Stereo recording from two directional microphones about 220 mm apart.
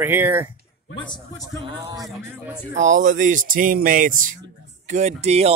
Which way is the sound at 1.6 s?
20° right (ahead or behind).